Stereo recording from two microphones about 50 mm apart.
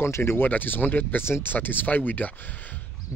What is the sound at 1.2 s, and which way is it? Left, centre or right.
Speech, left.